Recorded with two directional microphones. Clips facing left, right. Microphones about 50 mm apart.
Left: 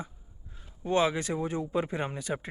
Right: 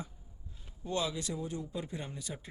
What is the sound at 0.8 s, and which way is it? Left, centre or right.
Speech, left.